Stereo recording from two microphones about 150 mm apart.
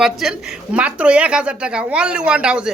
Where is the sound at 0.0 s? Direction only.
5° right (ahead or behind).